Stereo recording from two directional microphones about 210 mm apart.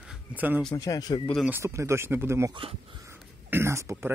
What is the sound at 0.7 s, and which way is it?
Speech, 15° left (ahead or behind).